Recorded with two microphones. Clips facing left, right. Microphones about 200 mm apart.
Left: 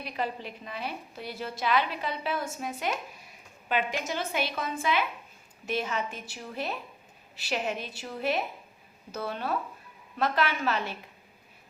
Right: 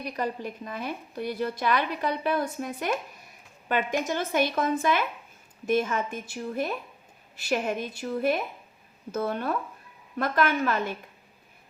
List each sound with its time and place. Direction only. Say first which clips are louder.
0.0 s a woman's voice: right 3 dB; 45° right (ahead or behind)
9.1 s a woman's voice: right 4 dB; 50° right (ahead or behind)